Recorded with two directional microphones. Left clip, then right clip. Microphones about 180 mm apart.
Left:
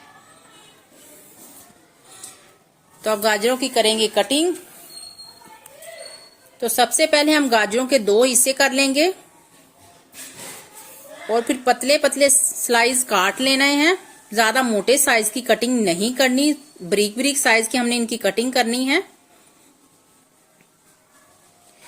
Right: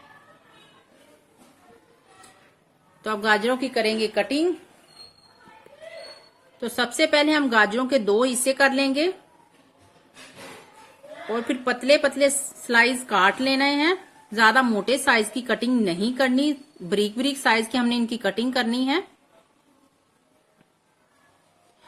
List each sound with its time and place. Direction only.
3.0 s a woman's voice: 20° left (ahead or behind)
6.6 s a woman's voice: 15° left (ahead or behind)
11.3 s a woman's voice: 15° left (ahead or behind)